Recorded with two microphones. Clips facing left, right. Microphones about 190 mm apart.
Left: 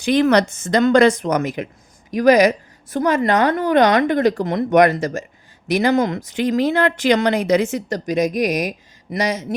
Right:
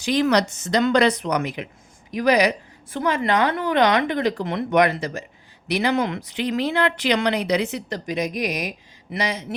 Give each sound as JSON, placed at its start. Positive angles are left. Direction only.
{"t": 0.0, "sound": "a woman's voice", "side_deg": 55}